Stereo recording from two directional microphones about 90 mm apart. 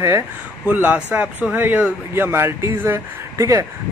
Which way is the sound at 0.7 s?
20° right (ahead or behind).